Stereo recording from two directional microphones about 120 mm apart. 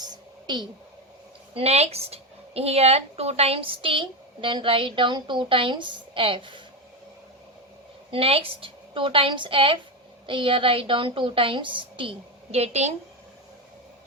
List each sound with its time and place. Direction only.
0.4 s speech: 40° right (ahead or behind)
1.5 s speech: 60° right (ahead or behind); by 6.6 s 45° right (ahead or behind)
8.1 s speech: 50° right (ahead or behind)